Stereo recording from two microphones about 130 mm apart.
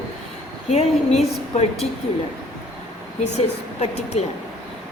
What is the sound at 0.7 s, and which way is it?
A woman's voice, 55° left (ahead or behind).